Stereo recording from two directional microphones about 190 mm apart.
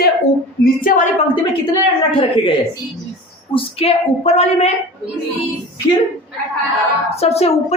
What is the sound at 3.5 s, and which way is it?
A woman's voice, 30° left (ahead or behind).